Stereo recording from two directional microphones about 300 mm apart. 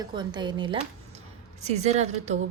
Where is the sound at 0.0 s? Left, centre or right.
Centre.